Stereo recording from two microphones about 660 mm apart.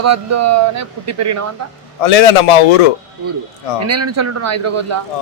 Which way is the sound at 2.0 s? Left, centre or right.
Left.